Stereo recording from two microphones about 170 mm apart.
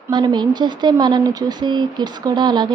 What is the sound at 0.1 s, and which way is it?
Speech, 25° right (ahead or behind).